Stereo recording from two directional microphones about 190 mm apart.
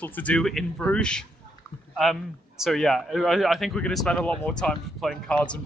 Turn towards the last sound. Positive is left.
turn(degrees=5)  # may be behind; listen again after turning